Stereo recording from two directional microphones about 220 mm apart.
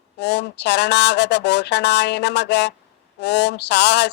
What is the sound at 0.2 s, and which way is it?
Speech, 50° left (ahead or behind).